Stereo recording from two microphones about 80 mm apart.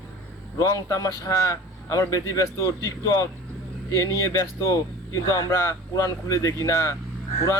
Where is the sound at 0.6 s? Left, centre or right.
Left.